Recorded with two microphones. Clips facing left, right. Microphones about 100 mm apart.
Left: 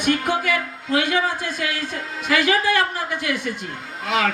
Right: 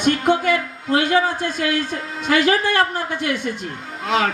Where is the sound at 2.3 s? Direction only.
35° right (ahead or behind).